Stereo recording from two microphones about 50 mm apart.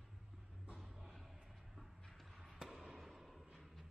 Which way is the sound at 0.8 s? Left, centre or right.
Centre.